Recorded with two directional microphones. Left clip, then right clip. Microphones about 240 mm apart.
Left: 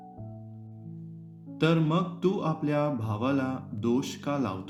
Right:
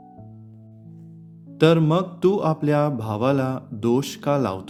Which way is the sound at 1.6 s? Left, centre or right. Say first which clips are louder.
Right 9 dB; right.